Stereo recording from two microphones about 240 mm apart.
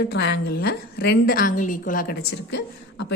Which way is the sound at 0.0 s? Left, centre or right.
Left.